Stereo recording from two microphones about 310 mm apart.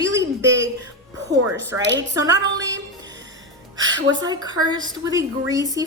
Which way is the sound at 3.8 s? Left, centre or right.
Right.